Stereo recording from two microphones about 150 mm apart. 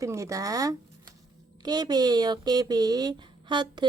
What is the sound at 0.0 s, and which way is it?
Speech, 20° right (ahead or behind).